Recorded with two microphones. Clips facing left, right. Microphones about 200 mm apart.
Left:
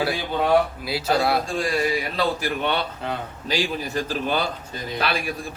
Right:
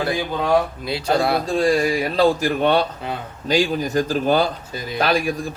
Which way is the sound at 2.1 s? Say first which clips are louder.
Right 7 dB; 45° right (ahead or behind).